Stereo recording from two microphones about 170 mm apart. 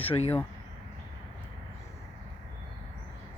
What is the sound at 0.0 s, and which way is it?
Speech, 35° left (ahead or behind).